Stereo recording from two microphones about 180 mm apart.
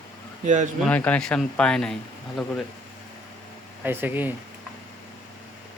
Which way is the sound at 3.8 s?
10° right (ahead or behind).